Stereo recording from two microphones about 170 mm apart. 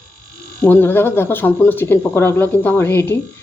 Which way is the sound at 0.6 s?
10° left (ahead or behind).